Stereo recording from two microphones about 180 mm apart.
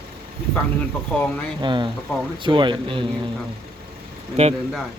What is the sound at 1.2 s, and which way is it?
Speech, 5° left (ahead or behind).